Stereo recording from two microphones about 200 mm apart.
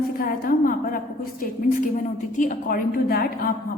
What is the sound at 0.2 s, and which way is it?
A woman's voice, 45° left (ahead or behind).